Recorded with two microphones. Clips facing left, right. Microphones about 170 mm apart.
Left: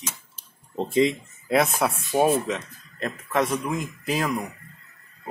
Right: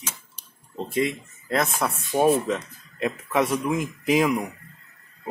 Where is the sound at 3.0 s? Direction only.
10° right (ahead or behind).